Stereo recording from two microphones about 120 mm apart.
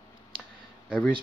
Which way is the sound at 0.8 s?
10° right (ahead or behind).